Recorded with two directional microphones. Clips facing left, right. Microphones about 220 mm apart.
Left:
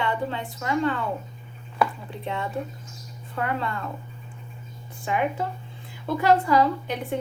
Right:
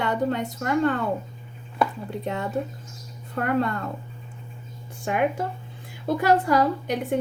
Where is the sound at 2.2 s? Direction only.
45° right (ahead or behind).